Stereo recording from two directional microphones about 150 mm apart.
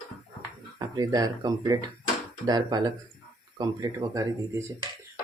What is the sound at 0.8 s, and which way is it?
Speech, 25° right (ahead or behind).